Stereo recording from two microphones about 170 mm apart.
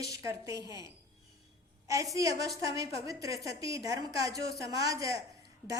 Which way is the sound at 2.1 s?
20° right (ahead or behind).